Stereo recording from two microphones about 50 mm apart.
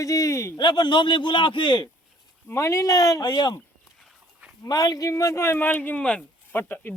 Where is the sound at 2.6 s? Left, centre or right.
Left.